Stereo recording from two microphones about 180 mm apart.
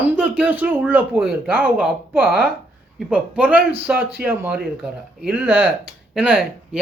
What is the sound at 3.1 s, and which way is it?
Speech, 5° right (ahead or behind).